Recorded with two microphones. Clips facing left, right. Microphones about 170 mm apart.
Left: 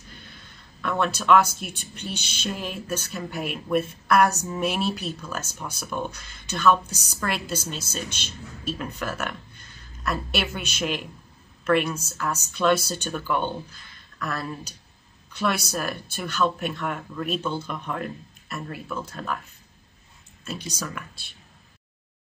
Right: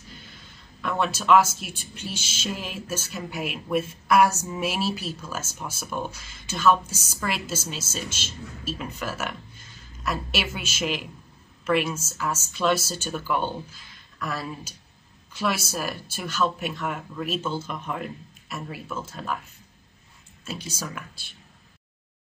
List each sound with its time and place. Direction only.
0.7 s speech: 5° right (ahead or behind)
2.0 s music: 60° left (ahead or behind)
2.4 s a woman's voice: 5° right (ahead or behind)
20.7 s speech: centre (ahead or behind)